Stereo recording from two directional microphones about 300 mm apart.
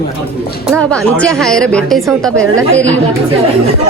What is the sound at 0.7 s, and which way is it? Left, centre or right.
A woman's voice, centre.